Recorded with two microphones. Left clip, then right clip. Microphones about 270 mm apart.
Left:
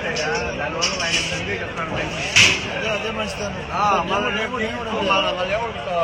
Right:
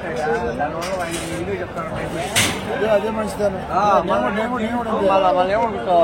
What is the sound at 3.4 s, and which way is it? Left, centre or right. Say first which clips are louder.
A man's voice: right 4 dB; right.